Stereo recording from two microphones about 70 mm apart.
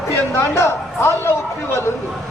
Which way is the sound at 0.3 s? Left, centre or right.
Left.